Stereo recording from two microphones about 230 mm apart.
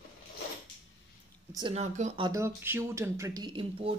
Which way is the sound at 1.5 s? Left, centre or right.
Right.